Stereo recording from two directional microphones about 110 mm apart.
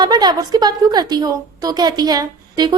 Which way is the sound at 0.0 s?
40° right (ahead or behind).